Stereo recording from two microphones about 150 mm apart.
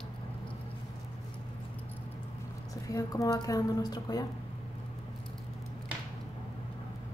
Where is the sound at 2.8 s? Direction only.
20° left (ahead or behind).